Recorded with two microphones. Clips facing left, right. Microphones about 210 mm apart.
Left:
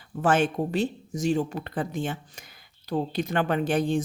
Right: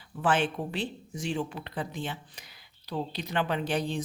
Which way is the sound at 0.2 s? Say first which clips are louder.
Left 4 dB; 45° left (ahead or behind).